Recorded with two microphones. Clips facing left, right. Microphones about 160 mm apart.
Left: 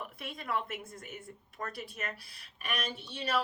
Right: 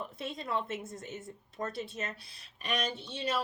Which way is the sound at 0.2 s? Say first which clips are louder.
Right 1 dB; 25° right (ahead or behind).